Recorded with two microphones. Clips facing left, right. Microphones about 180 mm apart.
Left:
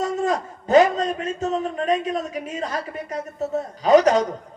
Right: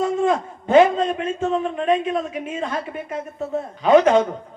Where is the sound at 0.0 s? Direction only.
40° left (ahead or behind).